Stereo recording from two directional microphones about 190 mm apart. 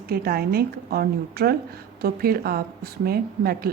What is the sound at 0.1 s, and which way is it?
A woman's voice, 55° right (ahead or behind).